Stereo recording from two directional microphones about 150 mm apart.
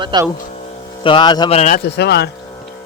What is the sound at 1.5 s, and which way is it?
Speech, 55° left (ahead or behind).